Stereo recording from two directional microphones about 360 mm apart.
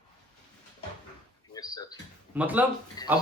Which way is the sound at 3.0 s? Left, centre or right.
Centre.